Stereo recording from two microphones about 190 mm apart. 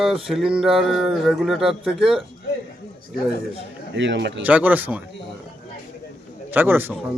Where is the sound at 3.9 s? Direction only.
70° right (ahead or behind).